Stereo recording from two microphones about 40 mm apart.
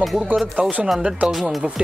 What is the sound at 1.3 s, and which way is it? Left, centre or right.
Speech, centre.